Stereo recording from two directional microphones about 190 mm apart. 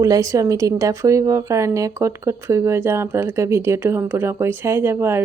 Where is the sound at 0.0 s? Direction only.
15° right (ahead or behind).